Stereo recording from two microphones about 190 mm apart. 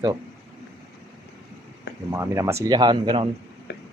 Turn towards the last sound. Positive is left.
turn(degrees=-25)  # may be behind; listen again after turning